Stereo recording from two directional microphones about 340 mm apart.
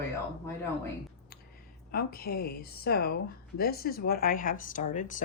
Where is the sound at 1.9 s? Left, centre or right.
Left.